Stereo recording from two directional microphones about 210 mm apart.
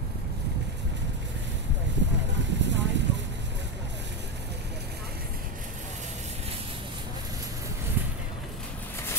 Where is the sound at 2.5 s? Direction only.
60° right (ahead or behind).